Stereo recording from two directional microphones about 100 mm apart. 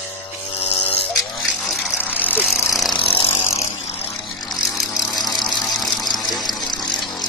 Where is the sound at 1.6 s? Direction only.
Centre (ahead or behind).